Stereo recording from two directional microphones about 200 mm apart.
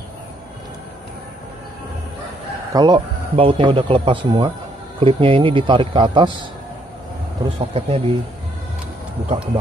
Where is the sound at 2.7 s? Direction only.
20° right (ahead or behind).